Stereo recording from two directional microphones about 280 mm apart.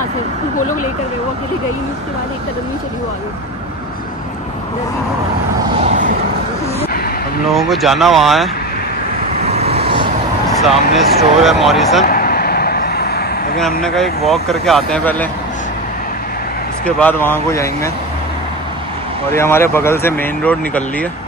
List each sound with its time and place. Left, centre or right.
5.8 s vehicle: right
7.5 s speech: centre
9.4 s vehicle: right
10.6 s speech: centre
12.0 s vehicle: left
13.8 s speech: centre
16.8 s speech: centre
19.3 s speech: centre